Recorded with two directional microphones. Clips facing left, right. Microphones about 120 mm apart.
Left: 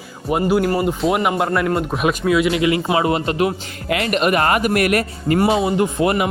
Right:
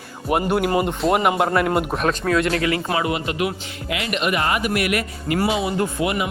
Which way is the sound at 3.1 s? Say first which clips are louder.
Left 5 dB; 35° left (ahead or behind).